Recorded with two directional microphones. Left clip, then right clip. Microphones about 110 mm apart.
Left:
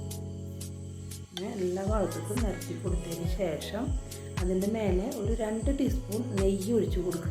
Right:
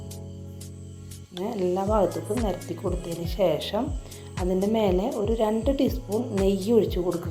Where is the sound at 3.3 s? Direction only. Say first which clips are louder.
Right 10 dB; 35° right (ahead or behind).